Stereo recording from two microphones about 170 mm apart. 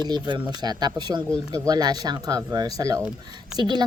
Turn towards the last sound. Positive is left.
turn(degrees=-25)  # may be behind; listen again after turning